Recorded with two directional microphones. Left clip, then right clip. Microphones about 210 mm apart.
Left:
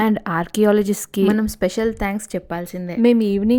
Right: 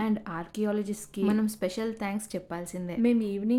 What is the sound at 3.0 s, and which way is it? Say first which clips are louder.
Speech: left 12 dB; 40° left (ahead or behind).